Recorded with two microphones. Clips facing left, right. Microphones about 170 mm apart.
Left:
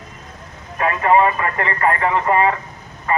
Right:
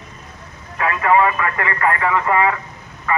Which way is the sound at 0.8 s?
30° left (ahead or behind).